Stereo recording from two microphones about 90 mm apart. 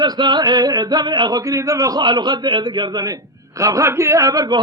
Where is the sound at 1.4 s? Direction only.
40° right (ahead or behind).